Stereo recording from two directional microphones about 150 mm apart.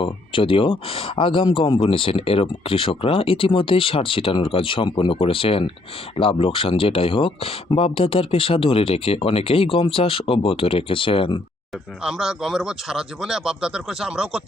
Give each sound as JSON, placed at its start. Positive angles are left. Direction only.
{"t": 0.0, "sound": "speech", "side_deg": 35}
{"t": 12.0, "sound": "speech", "side_deg": -5}